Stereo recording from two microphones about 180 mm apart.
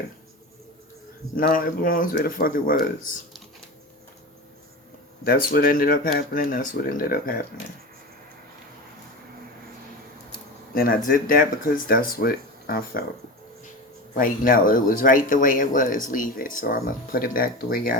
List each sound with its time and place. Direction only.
1.4 s speech: 50° left (ahead or behind)
5.2 s speech: 55° left (ahead or behind)
10.8 s speech: 55° left (ahead or behind)
14.1 s speech: 50° left (ahead or behind)